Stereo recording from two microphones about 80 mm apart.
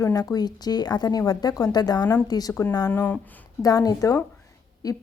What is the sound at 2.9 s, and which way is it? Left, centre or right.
Speech, left.